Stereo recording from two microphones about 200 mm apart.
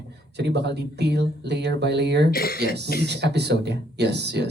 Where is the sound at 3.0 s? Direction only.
55° right (ahead or behind).